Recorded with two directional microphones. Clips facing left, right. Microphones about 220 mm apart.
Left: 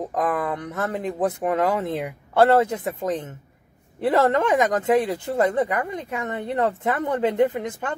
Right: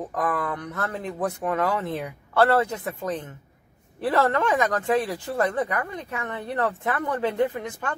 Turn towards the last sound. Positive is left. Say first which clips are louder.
# left 4 dB
turn(degrees=20)  # may be behind; listen again after turning